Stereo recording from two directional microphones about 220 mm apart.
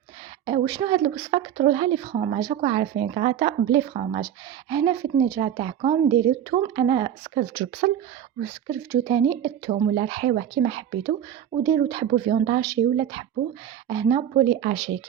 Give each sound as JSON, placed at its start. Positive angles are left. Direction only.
{"t": 0.4, "sound": "speech", "side_deg": -20}
{"t": 7.3, "sound": "speech", "side_deg": -40}
{"t": 8.4, "sound": "speech", "side_deg": -15}